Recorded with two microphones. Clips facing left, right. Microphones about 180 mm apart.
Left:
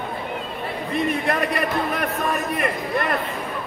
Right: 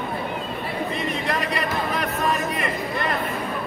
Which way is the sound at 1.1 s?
55° left (ahead or behind).